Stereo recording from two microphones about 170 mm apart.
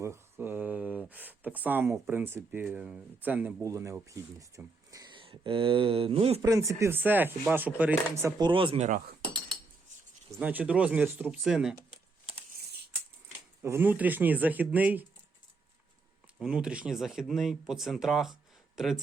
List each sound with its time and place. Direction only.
0.0 s speech: 15° right (ahead or behind); by 6.4 s 35° right (ahead or behind)
6.4 s speech: 20° right (ahead or behind)
8.4 s speech: 30° right (ahead or behind)
10.4 s speech: 10° right (ahead or behind)
13.6 s speech: 15° right (ahead or behind)
16.4 s speech: 5° right (ahead or behind)